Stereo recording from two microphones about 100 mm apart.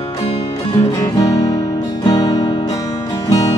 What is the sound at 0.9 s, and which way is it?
Guitar, 40° left (ahead or behind).